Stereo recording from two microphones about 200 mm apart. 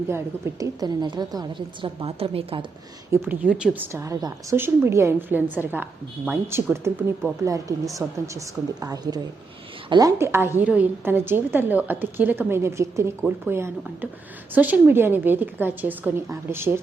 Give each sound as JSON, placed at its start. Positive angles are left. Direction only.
{"t": 0.1, "sound": "a woman's voice", "side_deg": -15}
{"t": 3.1, "sound": "a woman's voice", "side_deg": -10}